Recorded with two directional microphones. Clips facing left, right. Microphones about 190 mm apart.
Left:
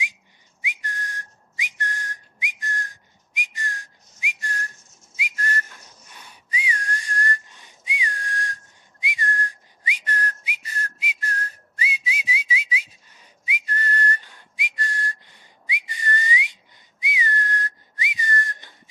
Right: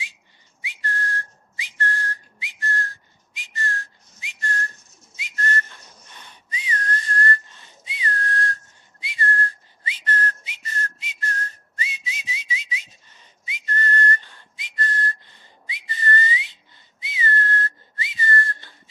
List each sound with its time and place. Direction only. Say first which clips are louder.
0.6 s whistling: right 5 dB; 15° left (ahead or behind)